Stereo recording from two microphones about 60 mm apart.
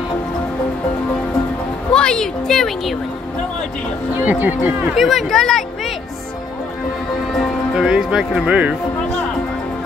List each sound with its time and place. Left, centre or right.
1.9 s speech: centre
4.2 s speech: right
4.9 s speech: centre
7.7 s speech: centre